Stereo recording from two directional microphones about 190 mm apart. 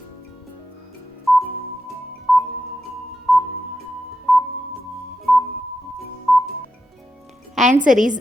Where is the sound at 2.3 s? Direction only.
Centre (ahead or behind).